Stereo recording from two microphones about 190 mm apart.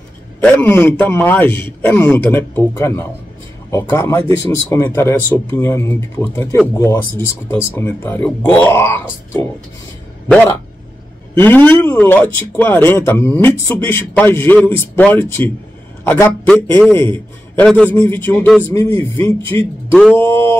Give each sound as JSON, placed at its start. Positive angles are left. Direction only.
{"t": 0.4, "sound": "speech", "side_deg": 10}
{"t": 11.3, "sound": "speech", "side_deg": 10}
{"t": 19.9, "sound": "a sound", "side_deg": -5}
{"t": 20.2, "sound": "speech", "side_deg": 10}